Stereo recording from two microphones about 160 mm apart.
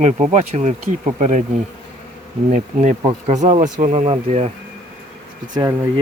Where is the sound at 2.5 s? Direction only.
50° right (ahead or behind).